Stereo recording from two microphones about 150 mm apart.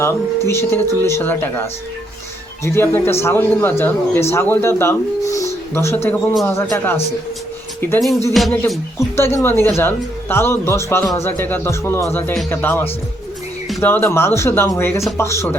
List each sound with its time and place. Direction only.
0.0 s speech: 15° left (ahead or behind)
8.3 s music: centre (ahead or behind)
9.0 s speech: 15° left (ahead or behind)